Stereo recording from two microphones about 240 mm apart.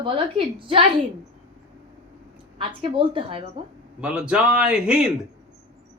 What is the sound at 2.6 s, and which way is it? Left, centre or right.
Speech, right.